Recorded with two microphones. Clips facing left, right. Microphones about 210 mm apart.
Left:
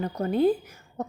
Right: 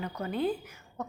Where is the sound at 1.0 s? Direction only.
40° left (ahead or behind).